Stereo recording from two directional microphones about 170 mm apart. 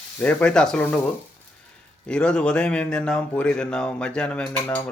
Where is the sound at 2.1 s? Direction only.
5° left (ahead or behind).